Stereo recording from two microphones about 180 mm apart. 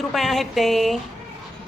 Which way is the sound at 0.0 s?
Centre (ahead or behind).